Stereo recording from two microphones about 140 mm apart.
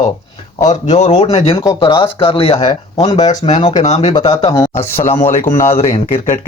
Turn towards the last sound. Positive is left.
turn(degrees=45)  # may be behind; listen again after turning